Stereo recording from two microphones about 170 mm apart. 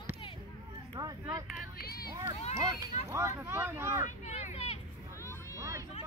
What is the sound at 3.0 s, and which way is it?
Speech, 15° right (ahead or behind).